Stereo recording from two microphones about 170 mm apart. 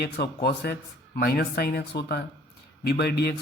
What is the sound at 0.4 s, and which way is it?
Speech, 70° left (ahead or behind).